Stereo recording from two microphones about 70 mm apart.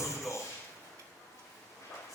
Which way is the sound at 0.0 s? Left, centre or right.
Left.